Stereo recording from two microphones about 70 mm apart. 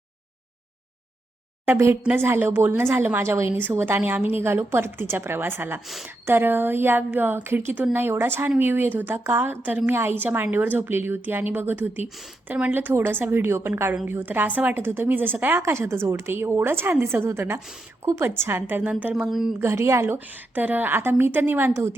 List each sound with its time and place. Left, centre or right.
1.6 s a woman's voice: right
9.9 s a woman's voice: right
15.7 s a woman's voice: right
18.9 s a woman's voice: right
19.3 s a woman's voice: centre
19.5 s a woman's voice: right
20.1 s a woman's voice: right